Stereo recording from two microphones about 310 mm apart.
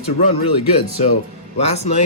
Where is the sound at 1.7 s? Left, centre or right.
Left.